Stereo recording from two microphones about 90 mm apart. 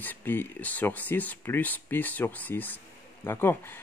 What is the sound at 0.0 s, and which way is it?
Speech, 20° left (ahead or behind).